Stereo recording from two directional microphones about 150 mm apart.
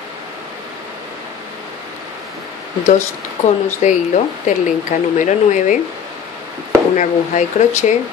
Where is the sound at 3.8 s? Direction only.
55° left (ahead or behind).